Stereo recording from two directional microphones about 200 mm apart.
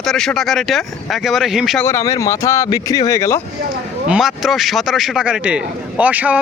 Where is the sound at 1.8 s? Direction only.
15° left (ahead or behind).